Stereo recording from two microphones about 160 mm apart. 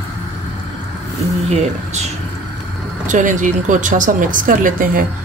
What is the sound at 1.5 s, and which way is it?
Speech, 45° right (ahead or behind).